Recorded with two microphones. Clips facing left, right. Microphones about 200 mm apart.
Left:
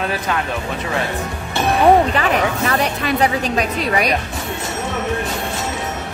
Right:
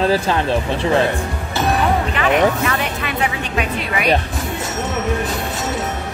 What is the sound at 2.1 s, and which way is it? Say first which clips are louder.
Speech: right 2 dB; 35° left (ahead or behind).